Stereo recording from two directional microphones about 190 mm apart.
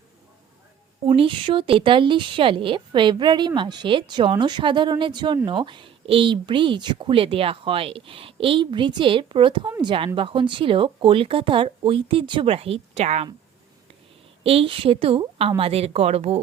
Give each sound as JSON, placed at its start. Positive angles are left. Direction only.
{"t": 1.0, "sound": "speech", "side_deg": -30}
{"t": 14.4, "sound": "speech", "side_deg": -30}